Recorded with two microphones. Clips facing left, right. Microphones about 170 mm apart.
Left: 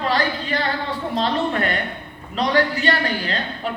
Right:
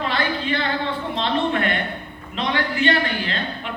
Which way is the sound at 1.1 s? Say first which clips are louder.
Left 1 dB; 40° left (ahead or behind).